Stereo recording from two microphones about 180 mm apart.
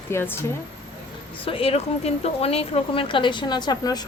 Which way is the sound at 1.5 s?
30° left (ahead or behind).